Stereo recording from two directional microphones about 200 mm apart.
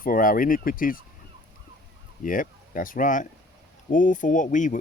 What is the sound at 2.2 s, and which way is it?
Speech, 45° left (ahead or behind).